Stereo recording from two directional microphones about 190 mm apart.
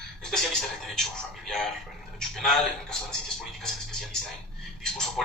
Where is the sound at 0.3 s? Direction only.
Centre (ahead or behind).